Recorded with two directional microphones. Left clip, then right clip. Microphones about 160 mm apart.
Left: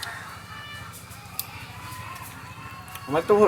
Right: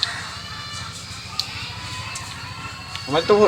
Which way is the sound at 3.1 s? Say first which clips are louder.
Right 4 dB; centre (ahead or behind).